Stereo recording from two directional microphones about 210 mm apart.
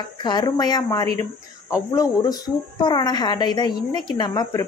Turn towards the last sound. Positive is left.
turn(degrees=20)  # may be behind; listen again after turning